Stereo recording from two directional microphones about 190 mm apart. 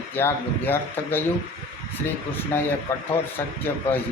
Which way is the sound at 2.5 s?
10° left (ahead or behind).